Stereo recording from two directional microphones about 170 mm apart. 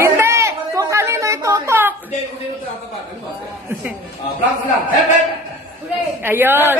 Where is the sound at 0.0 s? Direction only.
15° right (ahead or behind).